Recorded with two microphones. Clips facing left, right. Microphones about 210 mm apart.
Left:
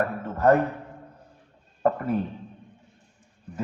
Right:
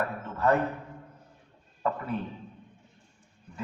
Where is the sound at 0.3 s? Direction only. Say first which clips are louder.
Left 6 dB; 45° left (ahead or behind).